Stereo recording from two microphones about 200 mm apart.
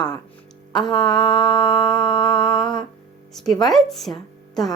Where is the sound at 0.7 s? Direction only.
20° left (ahead or behind).